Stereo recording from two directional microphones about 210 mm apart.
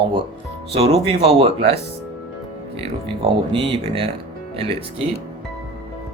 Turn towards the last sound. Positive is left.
turn(degrees=-25)  # may be behind; listen again after turning